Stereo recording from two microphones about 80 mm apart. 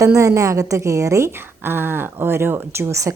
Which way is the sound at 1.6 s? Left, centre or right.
Right.